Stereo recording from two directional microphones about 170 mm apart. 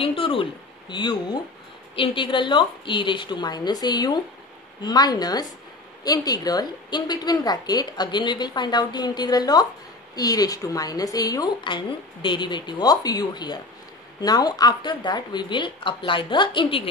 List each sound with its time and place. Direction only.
0.0 s a woman's voice: 30° left (ahead or behind)